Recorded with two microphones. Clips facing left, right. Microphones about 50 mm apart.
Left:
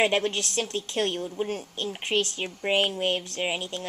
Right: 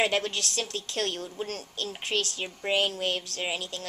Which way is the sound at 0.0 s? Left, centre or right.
Left.